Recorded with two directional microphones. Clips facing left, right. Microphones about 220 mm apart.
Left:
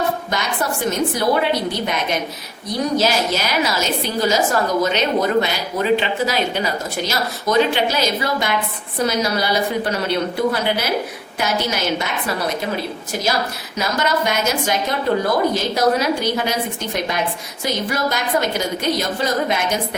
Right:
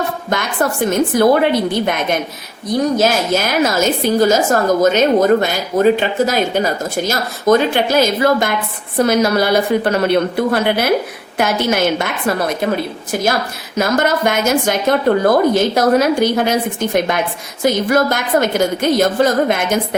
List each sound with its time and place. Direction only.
0.3 s a woman's voice: 50° right (ahead or behind)
3.0 s a woman's voice: 50° right (ahead or behind)
13.7 s a woman's voice: 50° right (ahead or behind)